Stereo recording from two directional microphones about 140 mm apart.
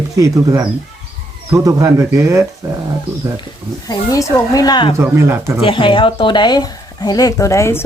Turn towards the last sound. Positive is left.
turn(degrees=20)  # may be behind; listen again after turning